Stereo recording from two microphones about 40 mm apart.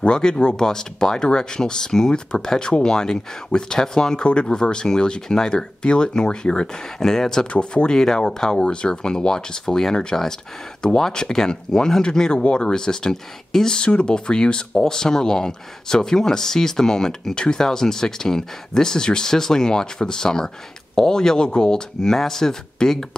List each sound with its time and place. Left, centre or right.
0.0 s speech: left